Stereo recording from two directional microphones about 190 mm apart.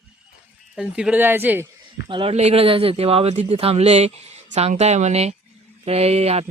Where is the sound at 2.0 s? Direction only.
25° right (ahead or behind).